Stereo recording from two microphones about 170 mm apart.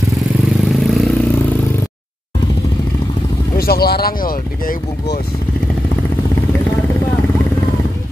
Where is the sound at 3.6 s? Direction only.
65° left (ahead or behind).